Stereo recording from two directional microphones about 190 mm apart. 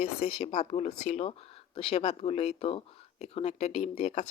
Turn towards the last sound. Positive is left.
turn(degrees=35)  # may be behind; listen again after turning